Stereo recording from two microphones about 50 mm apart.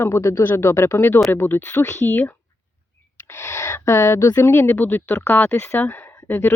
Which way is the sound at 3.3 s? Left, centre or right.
Left.